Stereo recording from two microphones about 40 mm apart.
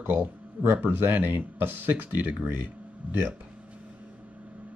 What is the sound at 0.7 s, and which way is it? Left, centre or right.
Speech, right.